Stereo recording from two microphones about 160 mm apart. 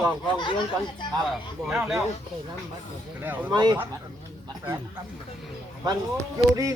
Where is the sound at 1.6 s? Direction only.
Centre (ahead or behind).